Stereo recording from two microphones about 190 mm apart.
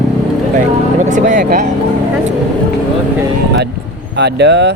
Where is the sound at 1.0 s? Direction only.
40° right (ahead or behind).